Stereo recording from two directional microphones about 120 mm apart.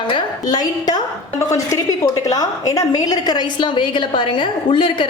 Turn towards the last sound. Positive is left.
turn(degrees=45)  # may be behind; listen again after turning